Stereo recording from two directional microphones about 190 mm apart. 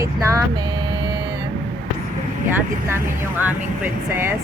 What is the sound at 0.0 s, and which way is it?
Speech, 15° right (ahead or behind).